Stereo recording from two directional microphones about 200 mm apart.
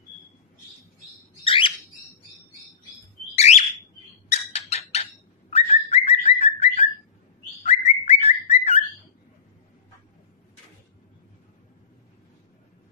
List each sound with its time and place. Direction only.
1.4 s bird: 25° left (ahead or behind)
3.3 s bird: 35° left (ahead or behind)
4.3 s a sound: 30° left (ahead or behind)
5.5 s bird: 30° left (ahead or behind)